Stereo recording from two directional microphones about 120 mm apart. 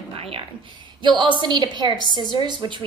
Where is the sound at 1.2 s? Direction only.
40° right (ahead or behind).